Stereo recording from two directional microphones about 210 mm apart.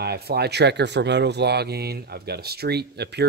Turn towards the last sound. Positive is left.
turn(degrees=-50)  # may be behind; listen again after turning